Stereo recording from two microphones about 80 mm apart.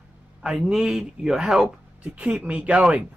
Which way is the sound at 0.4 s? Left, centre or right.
Centre.